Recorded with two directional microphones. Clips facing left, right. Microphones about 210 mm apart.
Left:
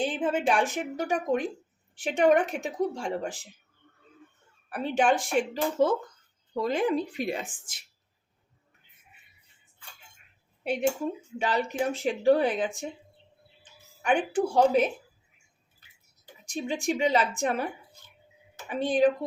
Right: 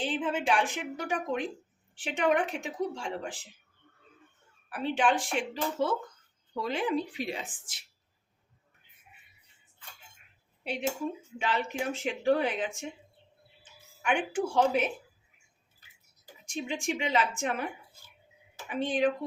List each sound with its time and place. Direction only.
0.1 s a woman's voice: 40° left (ahead or behind)
4.7 s a woman's voice: 45° left (ahead or behind)
10.6 s speech: 50° left (ahead or behind)
11.3 s speech: 40° left (ahead or behind)
16.5 s speech: 40° left (ahead or behind)
18.7 s speech: 35° left (ahead or behind)